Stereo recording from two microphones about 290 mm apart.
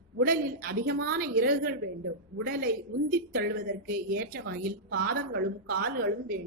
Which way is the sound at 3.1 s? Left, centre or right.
Right.